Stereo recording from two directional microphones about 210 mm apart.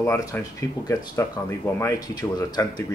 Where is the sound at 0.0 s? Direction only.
15° left (ahead or behind).